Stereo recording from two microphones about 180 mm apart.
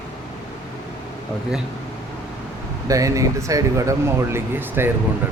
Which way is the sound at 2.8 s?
20° right (ahead or behind).